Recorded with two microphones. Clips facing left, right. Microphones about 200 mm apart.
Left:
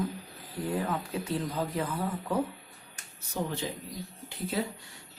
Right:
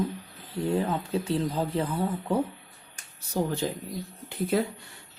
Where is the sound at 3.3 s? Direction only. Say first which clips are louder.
Right 5 dB; 45° right (ahead or behind).